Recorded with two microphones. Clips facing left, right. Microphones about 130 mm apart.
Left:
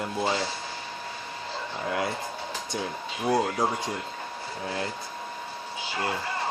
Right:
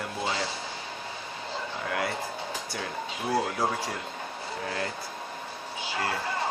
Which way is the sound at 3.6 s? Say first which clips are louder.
Left 1 dB; 20° left (ahead or behind).